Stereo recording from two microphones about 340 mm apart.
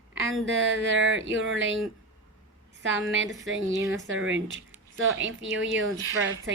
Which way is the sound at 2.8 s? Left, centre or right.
Right.